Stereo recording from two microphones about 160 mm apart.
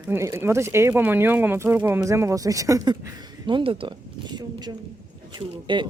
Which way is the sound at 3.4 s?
30° right (ahead or behind).